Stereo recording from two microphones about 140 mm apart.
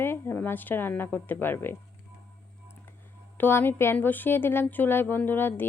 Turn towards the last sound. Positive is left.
turn(degrees=15)  # may be behind; listen again after turning